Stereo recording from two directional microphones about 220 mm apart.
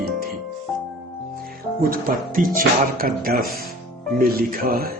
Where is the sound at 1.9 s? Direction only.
40° right (ahead or behind).